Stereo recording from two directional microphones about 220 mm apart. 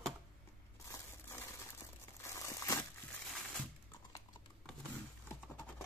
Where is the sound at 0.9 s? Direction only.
10° left (ahead or behind).